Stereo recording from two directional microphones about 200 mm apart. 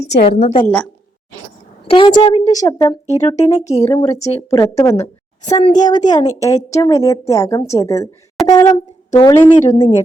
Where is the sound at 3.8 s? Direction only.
15° left (ahead or behind).